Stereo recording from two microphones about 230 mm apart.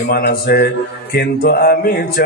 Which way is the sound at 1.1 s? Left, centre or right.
Left.